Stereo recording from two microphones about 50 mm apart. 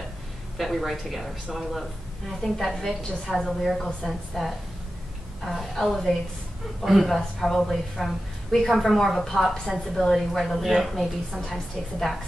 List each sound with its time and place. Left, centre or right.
0.6 s a woman's voice: centre